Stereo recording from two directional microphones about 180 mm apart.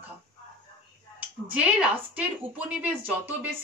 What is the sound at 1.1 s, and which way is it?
Speech, 5° right (ahead or behind).